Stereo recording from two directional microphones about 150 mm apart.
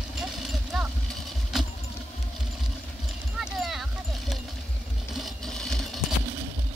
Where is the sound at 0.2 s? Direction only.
Centre (ahead or behind).